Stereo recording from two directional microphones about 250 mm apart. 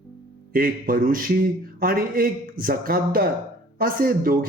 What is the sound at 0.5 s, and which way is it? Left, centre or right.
A man's voice, right.